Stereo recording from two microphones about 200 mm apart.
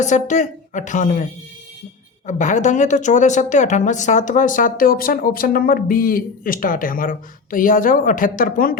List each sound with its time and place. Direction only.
0.0 s a woman's voice: 35° left (ahead or behind)